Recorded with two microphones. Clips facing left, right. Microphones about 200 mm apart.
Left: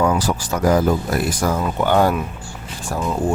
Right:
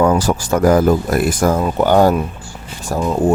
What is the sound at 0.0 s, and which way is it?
Speech, 45° right (ahead or behind).